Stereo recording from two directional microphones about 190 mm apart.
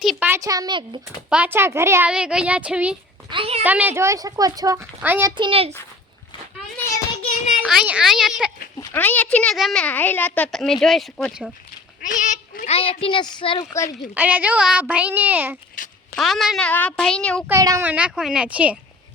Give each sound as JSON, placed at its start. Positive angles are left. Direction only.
{"t": 0.0, "sound": "a sound", "side_deg": 0}
{"t": 0.3, "sound": "a woman's voice", "side_deg": -20}
{"t": 1.3, "sound": "a child's voice", "side_deg": -10}
{"t": 3.2, "sound": "a woman's voice", "side_deg": -30}
{"t": 3.6, "sound": "a child's voice", "side_deg": -10}
{"t": 5.4, "sound": "a woman's voice", "side_deg": -30}
{"t": 7.3, "sound": "a sound", "side_deg": 40}
{"t": 7.6, "sound": "a woman's voice", "side_deg": -5}
{"t": 8.8, "sound": "a woman's voice", "side_deg": 10}
{"t": 12.0, "sound": "speech", "side_deg": 40}
{"t": 14.1, "sound": "a child's voice", "side_deg": -10}
{"t": 15.8, "sound": "a sound", "side_deg": 45}
{"t": 16.1, "sound": "a woman's voice", "side_deg": 0}
{"t": 17.5, "sound": "a child's voice", "side_deg": -15}